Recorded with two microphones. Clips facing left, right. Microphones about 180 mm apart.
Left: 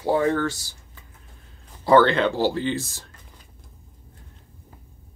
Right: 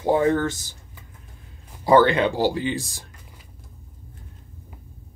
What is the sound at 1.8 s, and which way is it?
Speech, 15° right (ahead or behind).